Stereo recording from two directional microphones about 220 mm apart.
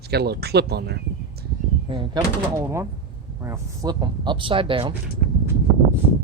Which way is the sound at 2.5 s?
10° right (ahead or behind).